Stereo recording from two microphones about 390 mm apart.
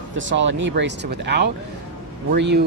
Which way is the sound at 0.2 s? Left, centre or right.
Right.